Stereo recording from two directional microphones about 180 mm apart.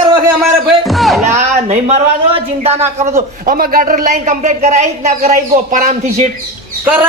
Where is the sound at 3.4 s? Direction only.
55° right (ahead or behind).